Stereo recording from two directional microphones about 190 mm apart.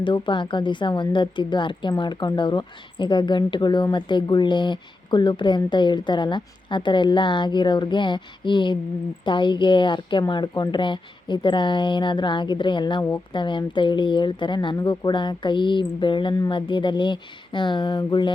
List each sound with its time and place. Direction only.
0.0 s a woman's voice: 25° left (ahead or behind)